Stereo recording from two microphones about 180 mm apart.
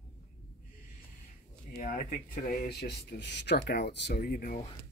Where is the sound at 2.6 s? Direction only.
70° left (ahead or behind).